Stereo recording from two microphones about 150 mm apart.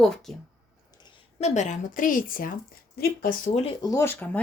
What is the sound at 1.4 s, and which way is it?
Speech, 50° left (ahead or behind).